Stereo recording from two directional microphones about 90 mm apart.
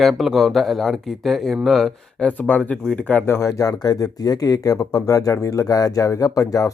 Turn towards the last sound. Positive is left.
turn(degrees=40)  # may be behind; listen again after turning